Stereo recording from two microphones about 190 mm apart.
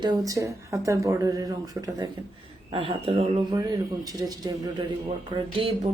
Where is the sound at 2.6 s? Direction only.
30° right (ahead or behind).